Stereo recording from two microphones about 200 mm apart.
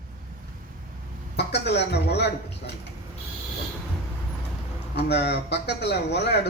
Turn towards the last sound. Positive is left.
turn(degrees=55)  # may be behind; listen again after turning